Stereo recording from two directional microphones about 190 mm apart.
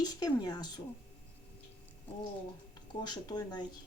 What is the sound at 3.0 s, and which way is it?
Speech, 20° left (ahead or behind).